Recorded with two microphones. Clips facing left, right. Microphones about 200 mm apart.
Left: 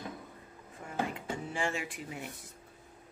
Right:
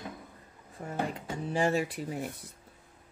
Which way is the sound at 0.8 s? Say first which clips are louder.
Right 2 dB; 35° right (ahead or behind).